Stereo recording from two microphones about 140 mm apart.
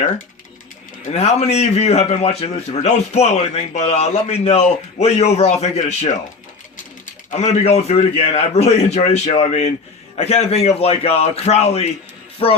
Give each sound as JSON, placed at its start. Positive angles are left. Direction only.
{"t": 1.1, "sound": "a man's voice", "side_deg": 50}
{"t": 7.3, "sound": "a man's voice", "side_deg": 50}
{"t": 12.4, "sound": "music", "side_deg": 40}